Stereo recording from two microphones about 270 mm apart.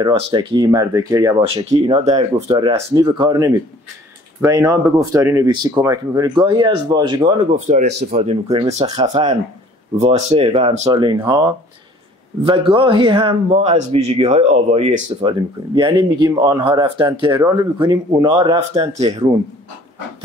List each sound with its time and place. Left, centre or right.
0.0 s speech: centre